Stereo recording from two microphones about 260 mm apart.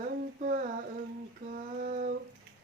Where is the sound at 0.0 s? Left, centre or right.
Right.